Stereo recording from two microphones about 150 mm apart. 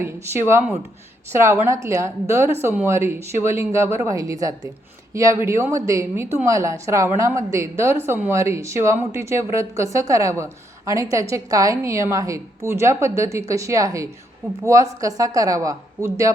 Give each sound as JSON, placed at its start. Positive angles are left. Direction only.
{"t": 0.0, "sound": "a woman's voice", "side_deg": -15}